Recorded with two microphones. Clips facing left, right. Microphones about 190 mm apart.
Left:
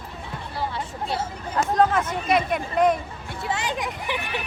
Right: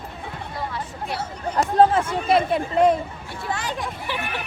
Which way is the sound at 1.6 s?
30° right (ahead or behind).